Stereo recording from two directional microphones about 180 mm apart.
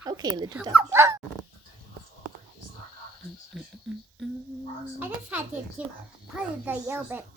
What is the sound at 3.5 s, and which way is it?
Speech, centre (ahead or behind).